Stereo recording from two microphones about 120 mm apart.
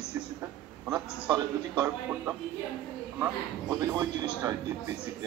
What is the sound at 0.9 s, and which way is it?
A man's voice, 35° right (ahead or behind).